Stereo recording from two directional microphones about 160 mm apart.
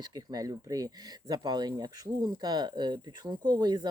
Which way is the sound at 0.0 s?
25° right (ahead or behind).